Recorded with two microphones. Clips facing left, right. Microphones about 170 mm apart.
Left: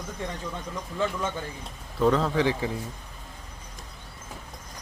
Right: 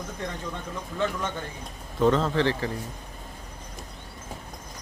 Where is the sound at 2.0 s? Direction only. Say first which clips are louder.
Right 1 dB; centre (ahead or behind).